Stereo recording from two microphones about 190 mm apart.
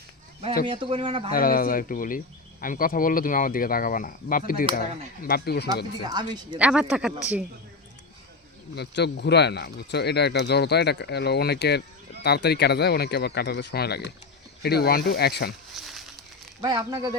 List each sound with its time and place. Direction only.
0.7 s speech: 30° right (ahead or behind)
1.3 s speech: 50° left (ahead or behind)
6.1 s speech: 20° right (ahead or behind)
6.6 s speech: 5° right (ahead or behind)
8.7 s speech: 60° left (ahead or behind)
15.7 s a sound: centre (ahead or behind)
16.6 s speech: 20° right (ahead or behind)